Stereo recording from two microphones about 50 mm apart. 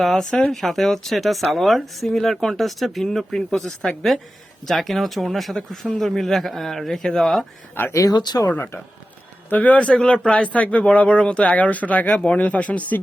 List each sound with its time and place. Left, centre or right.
0.0 s speech: centre
7.8 s speech: left
9.5 s speech: left